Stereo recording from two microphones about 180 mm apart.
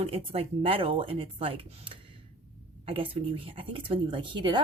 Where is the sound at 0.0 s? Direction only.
35° right (ahead or behind).